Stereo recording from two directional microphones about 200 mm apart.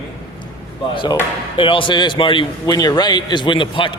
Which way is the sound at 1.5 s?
25° left (ahead or behind).